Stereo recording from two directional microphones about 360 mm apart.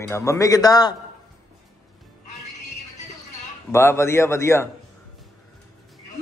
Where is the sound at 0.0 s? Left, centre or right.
Centre.